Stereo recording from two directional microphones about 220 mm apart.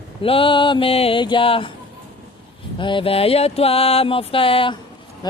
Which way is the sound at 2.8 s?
20° left (ahead or behind).